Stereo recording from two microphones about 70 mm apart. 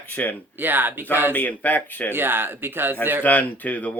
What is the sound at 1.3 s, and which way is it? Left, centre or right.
Speech, left.